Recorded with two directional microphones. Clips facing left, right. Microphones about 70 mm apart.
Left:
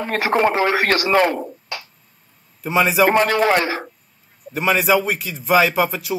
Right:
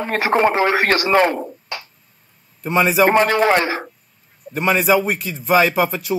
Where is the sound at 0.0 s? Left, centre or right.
Right.